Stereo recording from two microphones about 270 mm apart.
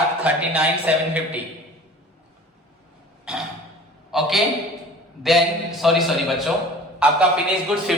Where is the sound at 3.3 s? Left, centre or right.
Centre.